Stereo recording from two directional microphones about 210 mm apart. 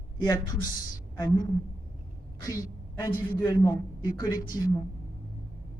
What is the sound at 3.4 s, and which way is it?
Speech, 20° left (ahead or behind).